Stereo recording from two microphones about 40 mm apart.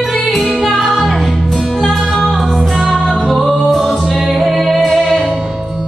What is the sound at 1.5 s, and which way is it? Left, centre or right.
Music, centre.